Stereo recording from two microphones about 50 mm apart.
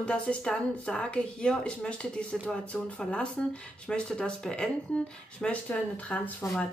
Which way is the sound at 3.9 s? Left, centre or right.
Centre.